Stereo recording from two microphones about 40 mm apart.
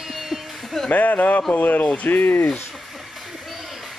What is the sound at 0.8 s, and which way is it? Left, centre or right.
Speech, left.